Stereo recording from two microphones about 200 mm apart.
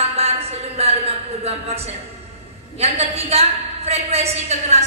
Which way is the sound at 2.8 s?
30° right (ahead or behind).